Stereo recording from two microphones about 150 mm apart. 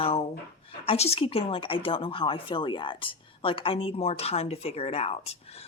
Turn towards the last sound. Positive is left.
turn(degrees=40)  # may be behind; listen again after turning